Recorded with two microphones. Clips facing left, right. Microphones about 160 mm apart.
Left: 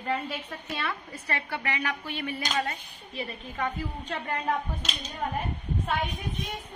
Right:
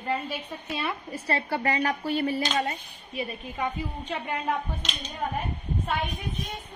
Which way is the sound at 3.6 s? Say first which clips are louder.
Right 1 dB; 5° right (ahead or behind).